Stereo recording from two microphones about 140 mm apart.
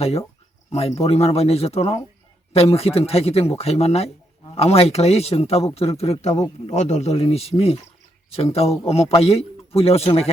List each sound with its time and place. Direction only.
0.7 s a man's voice: 50° left (ahead or behind)